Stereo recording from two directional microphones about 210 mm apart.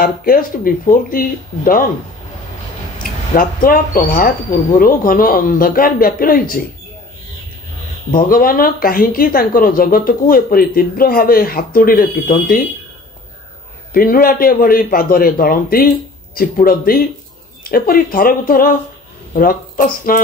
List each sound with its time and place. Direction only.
0.0 s a woman's voice: 45° left (ahead or behind)
3.0 s a woman's voice: 45° left (ahead or behind)
8.1 s a woman's voice: 45° left (ahead or behind)
13.9 s a woman's voice: 45° left (ahead or behind)